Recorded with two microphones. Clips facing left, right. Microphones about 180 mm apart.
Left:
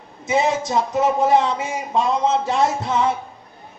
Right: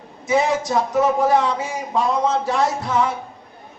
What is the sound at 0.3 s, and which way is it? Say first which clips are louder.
A man's voice: right 1 dB; 25° left (ahead or behind).